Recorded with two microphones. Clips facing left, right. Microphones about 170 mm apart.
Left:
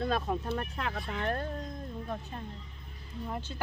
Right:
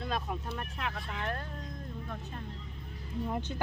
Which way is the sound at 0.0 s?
40° left (ahead or behind).